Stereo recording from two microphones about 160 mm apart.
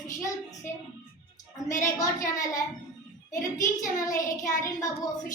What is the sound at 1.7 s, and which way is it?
Speech, 50° left (ahead or behind).